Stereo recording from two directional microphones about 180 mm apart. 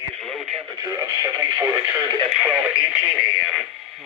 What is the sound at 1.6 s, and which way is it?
Radio, 20° right (ahead or behind).